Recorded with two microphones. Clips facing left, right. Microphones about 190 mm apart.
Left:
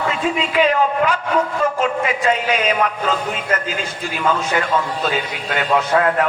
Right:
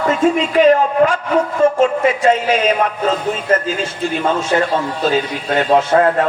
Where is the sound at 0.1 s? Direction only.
45° right (ahead or behind).